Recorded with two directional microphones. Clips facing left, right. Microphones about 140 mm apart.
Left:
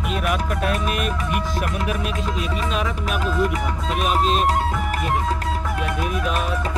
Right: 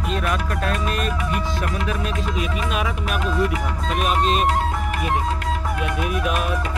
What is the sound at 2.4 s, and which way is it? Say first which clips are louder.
Speech: right 1 dB; 5° right (ahead or behind).